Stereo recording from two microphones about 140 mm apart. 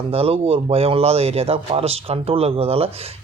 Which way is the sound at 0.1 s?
45° right (ahead or behind).